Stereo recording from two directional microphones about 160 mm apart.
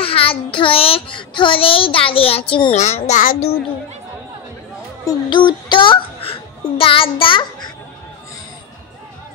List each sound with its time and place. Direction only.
0.0 s a child's voice: 35° left (ahead or behind)
2.7 s a child's voice: 45° left (ahead or behind)
5.0 s a child's voice: 25° left (ahead or behind)